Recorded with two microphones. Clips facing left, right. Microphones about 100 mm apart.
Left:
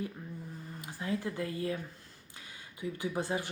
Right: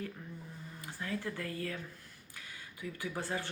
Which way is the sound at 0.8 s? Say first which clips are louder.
Left 4 dB; 20° left (ahead or behind).